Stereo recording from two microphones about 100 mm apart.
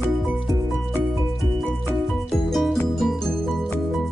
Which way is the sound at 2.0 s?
Centre (ahead or behind).